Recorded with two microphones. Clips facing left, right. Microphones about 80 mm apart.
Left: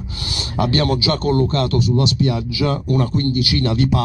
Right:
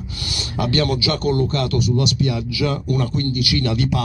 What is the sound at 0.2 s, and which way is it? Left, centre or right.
Speech, left.